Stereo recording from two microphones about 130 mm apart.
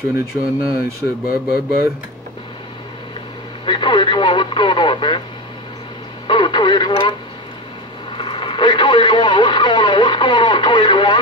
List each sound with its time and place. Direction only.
0.4 s speech: 25° left (ahead or behind)
1.3 s speech: 10° right (ahead or behind)
3.6 s speech: 40° left (ahead or behind)
6.2 s speech: 35° left (ahead or behind)
8.2 s speech: 40° left (ahead or behind)